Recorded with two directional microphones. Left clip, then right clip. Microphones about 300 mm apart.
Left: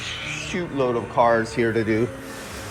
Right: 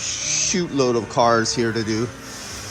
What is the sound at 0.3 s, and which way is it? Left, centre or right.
A man's voice, right.